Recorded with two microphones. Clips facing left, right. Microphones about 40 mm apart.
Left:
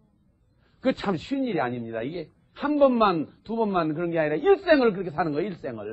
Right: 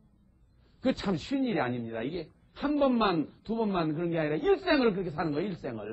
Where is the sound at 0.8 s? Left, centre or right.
Left.